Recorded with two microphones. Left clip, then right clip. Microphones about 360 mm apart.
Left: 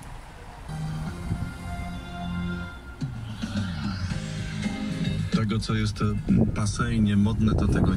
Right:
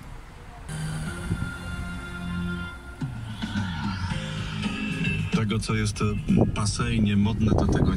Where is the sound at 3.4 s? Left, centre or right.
Centre.